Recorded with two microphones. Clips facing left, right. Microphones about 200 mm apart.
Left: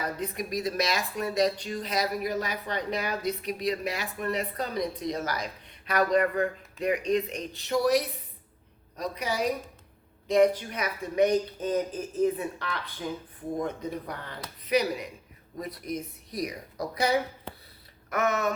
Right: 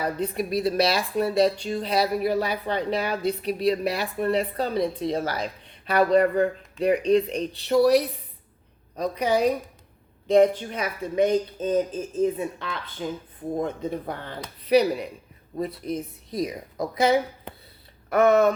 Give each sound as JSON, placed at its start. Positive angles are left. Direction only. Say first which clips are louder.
{"t": 0.0, "sound": "a woman's voice", "louder": "right 6 dB", "side_deg": -30}